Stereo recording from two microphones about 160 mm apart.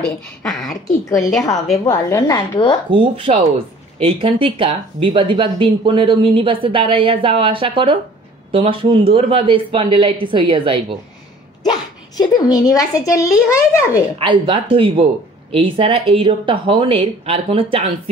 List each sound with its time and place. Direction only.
0.0 s speech: 5° left (ahead or behind)
1.0 s a woman's voice: 20° left (ahead or behind)
2.9 s speech: 30° right (ahead or behind)
11.7 s speech: 25° left (ahead or behind)
14.1 s speech: 30° right (ahead or behind)